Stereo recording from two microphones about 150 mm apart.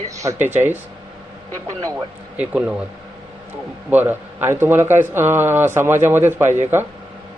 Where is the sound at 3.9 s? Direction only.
10° right (ahead or behind).